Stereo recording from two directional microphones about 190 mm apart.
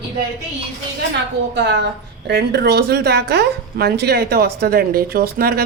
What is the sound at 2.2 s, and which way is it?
A woman's voice, 60° right (ahead or behind).